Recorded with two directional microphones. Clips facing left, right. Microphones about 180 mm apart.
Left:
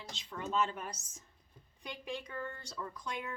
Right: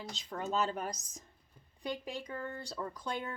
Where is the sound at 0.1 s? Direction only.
40° right (ahead or behind).